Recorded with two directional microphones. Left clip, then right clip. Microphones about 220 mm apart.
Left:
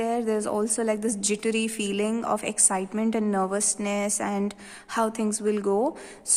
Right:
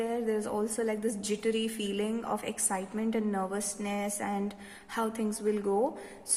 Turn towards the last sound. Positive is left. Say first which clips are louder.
# left 5 dB
turn(degrees=40)  # may be behind; listen again after turning